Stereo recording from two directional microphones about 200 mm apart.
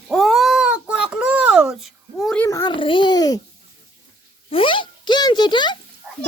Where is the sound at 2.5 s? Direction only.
20° left (ahead or behind).